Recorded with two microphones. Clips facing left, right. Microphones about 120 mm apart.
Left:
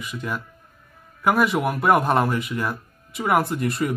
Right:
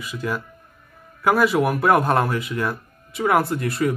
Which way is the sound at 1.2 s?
Centre (ahead or behind).